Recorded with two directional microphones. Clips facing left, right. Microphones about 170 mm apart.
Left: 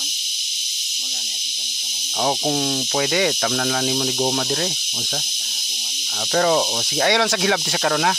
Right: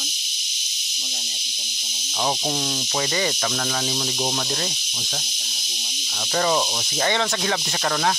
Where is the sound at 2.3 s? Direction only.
55° left (ahead or behind).